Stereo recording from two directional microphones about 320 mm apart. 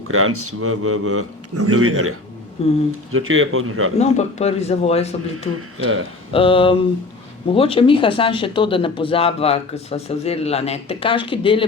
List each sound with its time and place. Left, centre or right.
0.1 s a man's voice: right
2.6 s a man's voice: centre
3.1 s speech: right
3.9 s a man's voice: centre
5.5 s speech: right
6.3 s speech: centre